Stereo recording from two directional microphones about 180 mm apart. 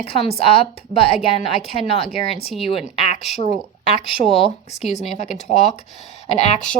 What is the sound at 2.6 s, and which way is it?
A woman's voice, 35° left (ahead or behind).